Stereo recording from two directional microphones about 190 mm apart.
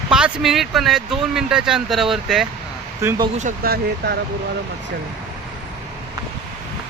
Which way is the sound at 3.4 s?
45° right (ahead or behind).